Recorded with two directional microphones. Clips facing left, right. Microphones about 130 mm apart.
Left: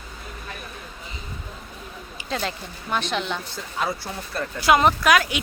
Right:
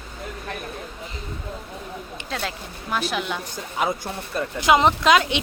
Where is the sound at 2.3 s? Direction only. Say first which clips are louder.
Left 3 dB; centre (ahead or behind); by 5.4 s 25° right (ahead or behind).